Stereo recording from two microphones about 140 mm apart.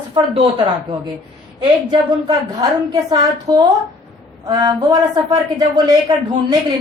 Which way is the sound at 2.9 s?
30° right (ahead or behind).